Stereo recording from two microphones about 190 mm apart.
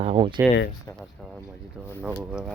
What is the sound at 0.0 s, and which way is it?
Speech, 30° right (ahead or behind).